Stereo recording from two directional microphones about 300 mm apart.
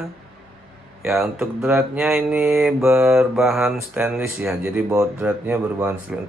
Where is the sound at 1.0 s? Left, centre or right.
Centre.